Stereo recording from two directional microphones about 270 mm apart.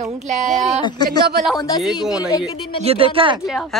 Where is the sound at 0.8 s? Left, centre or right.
Centre.